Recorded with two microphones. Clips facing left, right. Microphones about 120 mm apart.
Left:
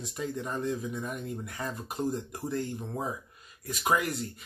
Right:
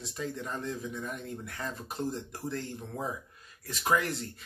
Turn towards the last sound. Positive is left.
turn(degrees=10)  # may be behind; listen again after turning